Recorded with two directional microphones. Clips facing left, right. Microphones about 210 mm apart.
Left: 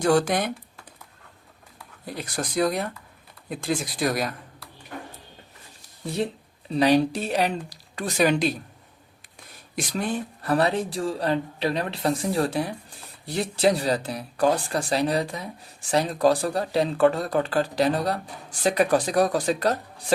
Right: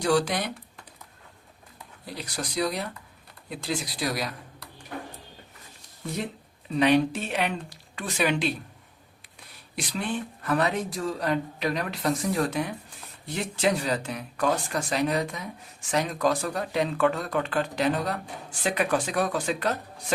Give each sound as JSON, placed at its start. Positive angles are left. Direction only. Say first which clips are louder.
{"t": 0.0, "sound": "speech", "louder": "left 3 dB", "side_deg": 50}
{"t": 2.0, "sound": "speech", "louder": "left 4 dB", "side_deg": 50}
{"t": 6.7, "sound": "speech", "louder": "left 2 dB", "side_deg": 35}
{"t": 9.7, "sound": "speech", "louder": "left 3 dB", "side_deg": 45}